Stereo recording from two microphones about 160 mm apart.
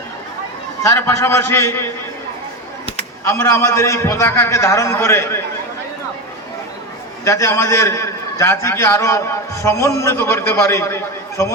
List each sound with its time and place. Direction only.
0.8 s a man's voice: 20° left (ahead or behind)
3.2 s a man's voice: 15° left (ahead or behind)
7.3 s a man's voice: 20° left (ahead or behind)